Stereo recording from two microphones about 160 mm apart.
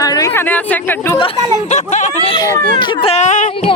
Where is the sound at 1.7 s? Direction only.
45° left (ahead or behind).